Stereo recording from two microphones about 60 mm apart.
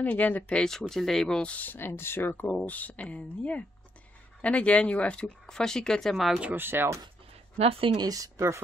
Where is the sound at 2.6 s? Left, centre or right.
Left; by 6.4 s centre.